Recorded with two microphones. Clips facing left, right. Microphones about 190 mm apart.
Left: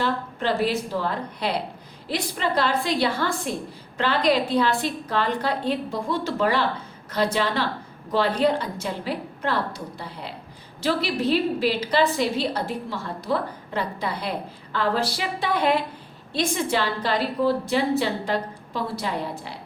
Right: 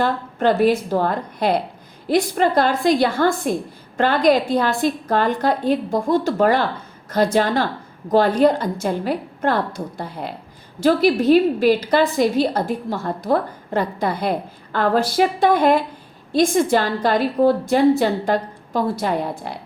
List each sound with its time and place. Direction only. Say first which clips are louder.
0.0 s a woman's voice: right 6 dB; 50° right (ahead or behind)